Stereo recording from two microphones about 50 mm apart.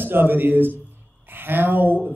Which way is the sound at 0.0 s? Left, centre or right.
Right.